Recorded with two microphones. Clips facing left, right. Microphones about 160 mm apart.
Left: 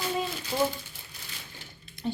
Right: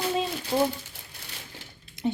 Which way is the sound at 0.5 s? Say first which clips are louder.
Right 3 dB; 35° right (ahead or behind).